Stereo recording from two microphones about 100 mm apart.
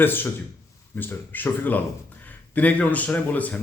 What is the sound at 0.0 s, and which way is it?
A man's voice, 20° left (ahead or behind).